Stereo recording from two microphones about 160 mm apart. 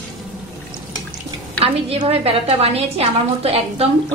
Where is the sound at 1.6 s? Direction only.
40° right (ahead or behind).